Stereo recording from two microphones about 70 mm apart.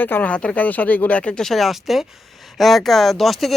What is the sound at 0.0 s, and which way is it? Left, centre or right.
Speech, left.